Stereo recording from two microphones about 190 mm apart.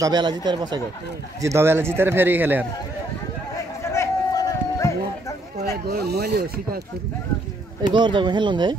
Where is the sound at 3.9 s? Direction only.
15° left (ahead or behind).